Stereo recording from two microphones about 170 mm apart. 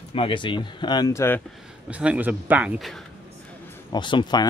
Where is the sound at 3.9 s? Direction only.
25° left (ahead or behind).